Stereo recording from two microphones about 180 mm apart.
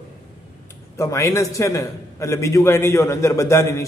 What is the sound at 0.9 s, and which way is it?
A man's voice, 15° left (ahead or behind).